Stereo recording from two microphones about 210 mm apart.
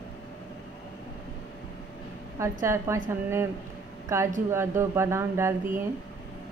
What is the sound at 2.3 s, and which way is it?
Speech, 15° right (ahead or behind).